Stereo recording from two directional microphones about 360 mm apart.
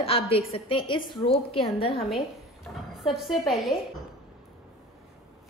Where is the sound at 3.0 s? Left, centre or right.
Centre.